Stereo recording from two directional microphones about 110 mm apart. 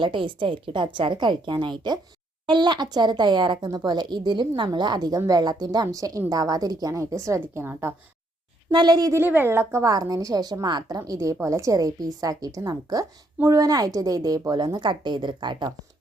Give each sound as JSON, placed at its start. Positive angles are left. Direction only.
{"t": 0.0, "sound": "a woman's voice", "side_deg": -50}
{"t": 8.7, "sound": "a woman's voice", "side_deg": -40}
{"t": 9.2, "sound": "a woman's voice", "side_deg": -20}